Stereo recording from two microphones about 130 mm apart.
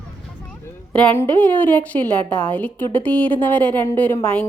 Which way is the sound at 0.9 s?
10° left (ahead or behind).